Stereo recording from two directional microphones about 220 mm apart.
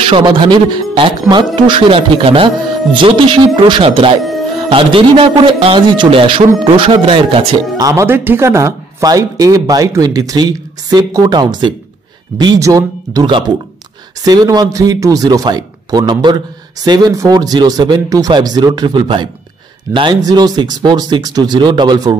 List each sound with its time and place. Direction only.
0.0 s a man's voice: 20° right (ahead or behind)